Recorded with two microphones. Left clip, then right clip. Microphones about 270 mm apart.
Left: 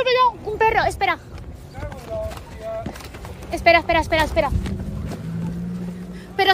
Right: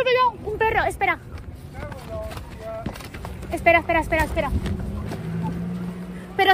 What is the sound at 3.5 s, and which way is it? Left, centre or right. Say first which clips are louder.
Speech: left 2 dB; centre.